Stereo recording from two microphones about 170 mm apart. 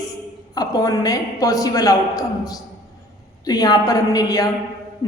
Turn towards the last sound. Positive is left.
turn(degrees=20)  # may be behind; listen again after turning